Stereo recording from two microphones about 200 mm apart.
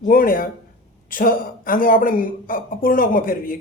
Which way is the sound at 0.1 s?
45° left (ahead or behind).